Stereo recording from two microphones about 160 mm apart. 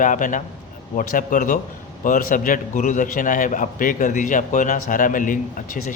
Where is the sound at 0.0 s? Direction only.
55° left (ahead or behind).